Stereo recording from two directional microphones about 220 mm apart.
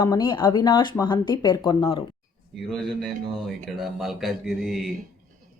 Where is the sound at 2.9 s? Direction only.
Centre (ahead or behind).